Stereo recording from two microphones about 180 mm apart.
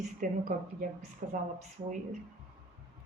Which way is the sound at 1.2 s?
45° right (ahead or behind).